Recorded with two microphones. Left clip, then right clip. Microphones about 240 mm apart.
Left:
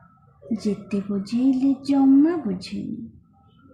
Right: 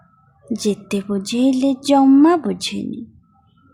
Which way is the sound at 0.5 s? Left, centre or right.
Right.